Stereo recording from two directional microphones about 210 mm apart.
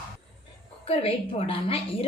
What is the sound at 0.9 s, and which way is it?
A woman's voice, 30° left (ahead or behind).